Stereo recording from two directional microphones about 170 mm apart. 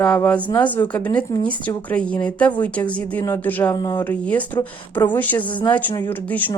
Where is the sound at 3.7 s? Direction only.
25° left (ahead or behind).